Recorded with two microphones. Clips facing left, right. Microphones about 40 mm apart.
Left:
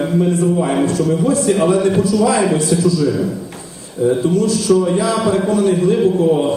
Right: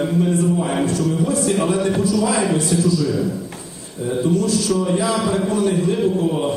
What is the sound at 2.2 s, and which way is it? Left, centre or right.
Speech, left.